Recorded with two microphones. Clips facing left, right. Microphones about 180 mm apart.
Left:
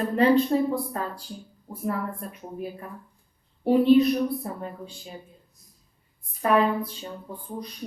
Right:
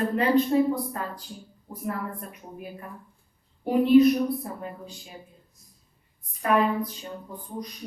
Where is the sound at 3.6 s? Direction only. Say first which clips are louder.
Left 3 dB; 35° left (ahead or behind).